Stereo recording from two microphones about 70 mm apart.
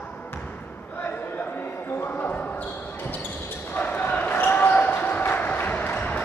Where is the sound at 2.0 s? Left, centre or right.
Left.